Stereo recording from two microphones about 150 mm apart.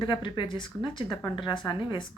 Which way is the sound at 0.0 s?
30° left (ahead or behind).